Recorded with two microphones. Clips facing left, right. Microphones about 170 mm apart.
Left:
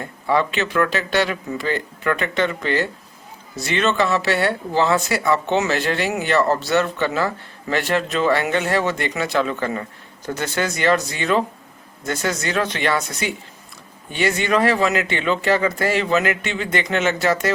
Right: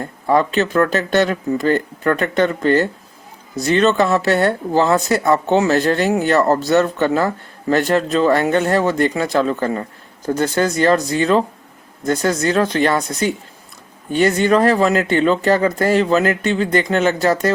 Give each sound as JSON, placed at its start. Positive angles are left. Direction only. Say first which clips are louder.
{"t": 0.0, "sound": "speech", "louder": "right 4 dB", "side_deg": -40}